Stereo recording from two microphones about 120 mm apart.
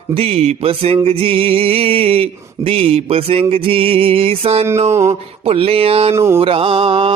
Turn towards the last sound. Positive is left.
turn(degrees=-50)  # may be behind; listen again after turning